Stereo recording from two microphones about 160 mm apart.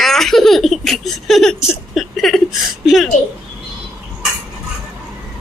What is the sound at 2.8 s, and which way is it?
Speech, centre (ahead or behind).